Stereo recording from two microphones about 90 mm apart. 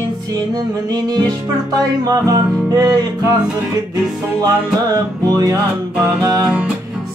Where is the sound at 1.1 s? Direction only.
50° right (ahead or behind).